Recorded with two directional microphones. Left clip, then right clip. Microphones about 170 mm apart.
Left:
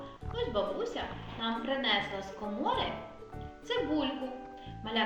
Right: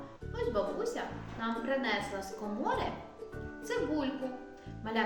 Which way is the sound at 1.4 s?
20° right (ahead or behind).